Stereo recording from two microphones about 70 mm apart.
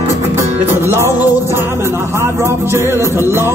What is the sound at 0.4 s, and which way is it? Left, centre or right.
Music, right.